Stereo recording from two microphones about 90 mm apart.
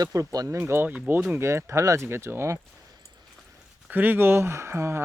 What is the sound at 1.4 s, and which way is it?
Speech, 30° right (ahead or behind).